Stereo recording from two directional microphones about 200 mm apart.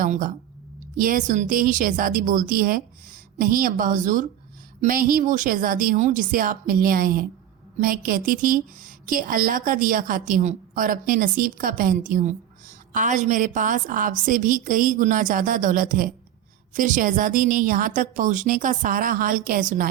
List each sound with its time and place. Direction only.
0.0 s a woman's voice: 40° right (ahead or behind)